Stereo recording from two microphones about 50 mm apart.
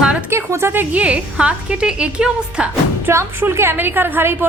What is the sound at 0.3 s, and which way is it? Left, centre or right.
Music, right.